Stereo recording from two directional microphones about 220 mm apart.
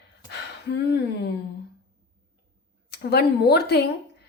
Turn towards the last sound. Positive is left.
turn(degrees=50)  # may be behind; listen again after turning